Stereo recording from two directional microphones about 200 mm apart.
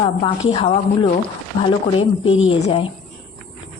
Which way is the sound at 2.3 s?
80° left.